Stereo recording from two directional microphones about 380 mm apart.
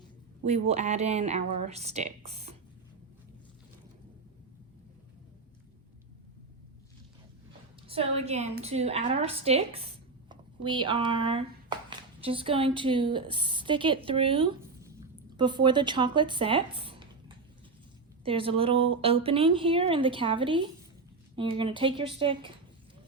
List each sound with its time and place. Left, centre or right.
0.4 s speech: centre
7.9 s a woman's voice: centre